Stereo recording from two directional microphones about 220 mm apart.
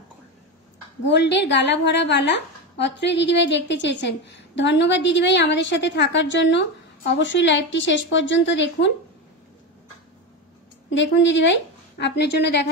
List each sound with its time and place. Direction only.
1.0 s a woman's voice: 50° left (ahead or behind)
11.0 s a woman's voice: 55° left (ahead or behind)